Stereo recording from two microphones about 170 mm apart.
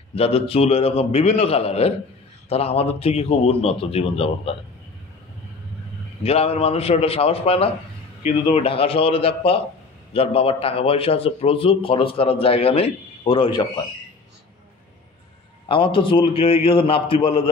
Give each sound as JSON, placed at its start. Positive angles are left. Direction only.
{"t": 0.1, "sound": "speech", "side_deg": 35}
{"t": 6.2, "sound": "speech", "side_deg": 35}
{"t": 15.7, "sound": "speech", "side_deg": 30}